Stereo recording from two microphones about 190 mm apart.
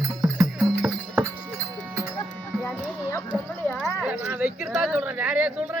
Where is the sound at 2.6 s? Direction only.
10° left (ahead or behind).